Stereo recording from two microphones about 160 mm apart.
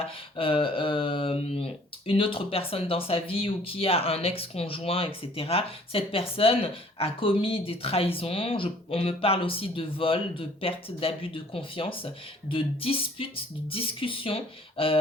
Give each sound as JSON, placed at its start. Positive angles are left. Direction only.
{"t": 0.0, "sound": "speech", "side_deg": 35}